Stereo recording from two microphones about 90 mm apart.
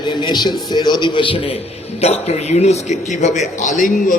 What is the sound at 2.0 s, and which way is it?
Speech, 90° left.